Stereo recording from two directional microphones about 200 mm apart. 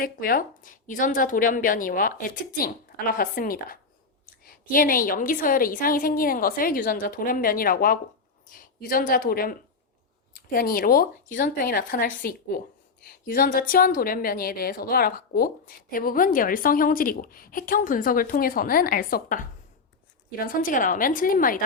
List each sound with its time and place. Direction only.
0.0 s speech: 45° left (ahead or behind)